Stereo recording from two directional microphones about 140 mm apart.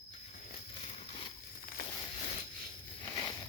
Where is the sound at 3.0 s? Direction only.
15° left (ahead or behind).